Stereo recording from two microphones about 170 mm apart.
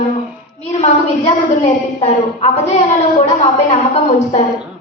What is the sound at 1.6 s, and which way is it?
A woman's voice, 40° left (ahead or behind).